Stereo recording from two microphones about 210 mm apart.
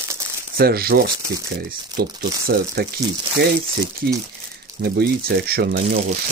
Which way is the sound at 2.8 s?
50° right (ahead or behind).